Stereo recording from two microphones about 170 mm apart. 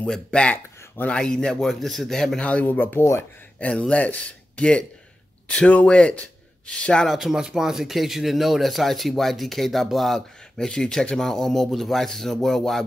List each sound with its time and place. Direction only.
0.0 s speech: 5° left (ahead or behind)